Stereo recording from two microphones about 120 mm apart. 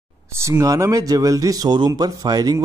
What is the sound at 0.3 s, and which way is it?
Speech, 25° right (ahead or behind).